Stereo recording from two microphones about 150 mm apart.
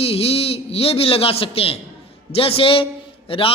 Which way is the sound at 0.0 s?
40° left (ahead or behind).